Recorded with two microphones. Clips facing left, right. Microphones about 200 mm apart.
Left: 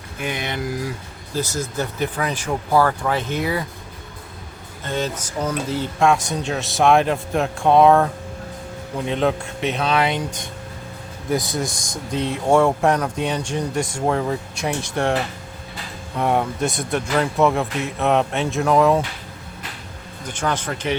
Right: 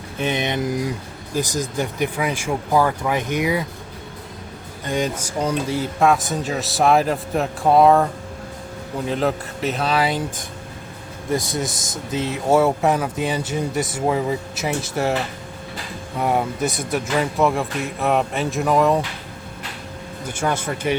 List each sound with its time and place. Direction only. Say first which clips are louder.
0.2 s speech: right 4 dB; 20° right (ahead or behind)
4.9 s speech: right 2 dB; 15° right (ahead or behind)
16.1 s speech: left 1 dB; 5° right (ahead or behind)
20.2 s speech: right 1 dB; 10° right (ahead or behind)